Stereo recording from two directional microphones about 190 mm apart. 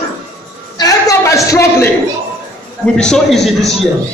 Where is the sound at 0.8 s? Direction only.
20° left (ahead or behind).